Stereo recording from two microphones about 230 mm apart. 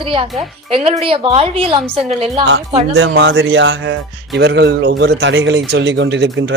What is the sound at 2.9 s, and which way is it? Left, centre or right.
Speech, right.